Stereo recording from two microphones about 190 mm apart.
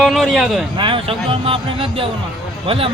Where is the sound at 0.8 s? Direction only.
25° right (ahead or behind).